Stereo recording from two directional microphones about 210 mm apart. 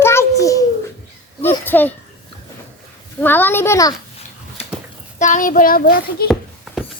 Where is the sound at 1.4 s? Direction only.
10° left (ahead or behind).